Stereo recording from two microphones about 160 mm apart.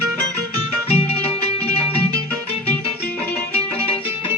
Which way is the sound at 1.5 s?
40° left (ahead or behind).